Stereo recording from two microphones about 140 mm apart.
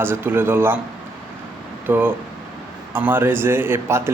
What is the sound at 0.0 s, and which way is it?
Speech, 15° right (ahead or behind).